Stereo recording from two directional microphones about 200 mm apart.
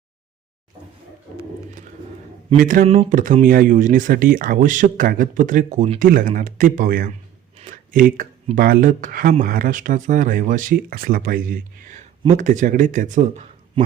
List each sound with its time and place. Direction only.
2.6 s speech: 40° right (ahead or behind)
2.8 s speech: 30° right (ahead or behind)
3.1 s speech: 40° right (ahead or behind)